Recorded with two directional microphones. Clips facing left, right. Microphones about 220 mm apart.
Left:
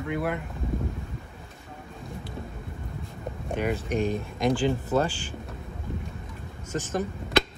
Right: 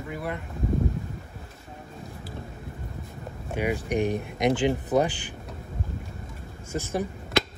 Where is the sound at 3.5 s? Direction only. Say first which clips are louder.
Right 1 dB; 10° right (ahead or behind).